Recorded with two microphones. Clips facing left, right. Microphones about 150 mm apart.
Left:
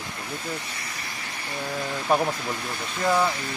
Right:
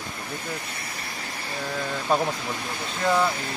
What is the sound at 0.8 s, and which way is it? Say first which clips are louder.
Vehicle: right 1 dB; 30° right (ahead or behind).